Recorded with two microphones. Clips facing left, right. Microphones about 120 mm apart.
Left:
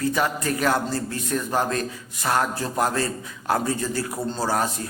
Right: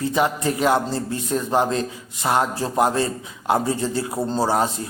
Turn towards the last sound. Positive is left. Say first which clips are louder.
# right 4 dB
turn(degrees=-25)  # may be behind; listen again after turning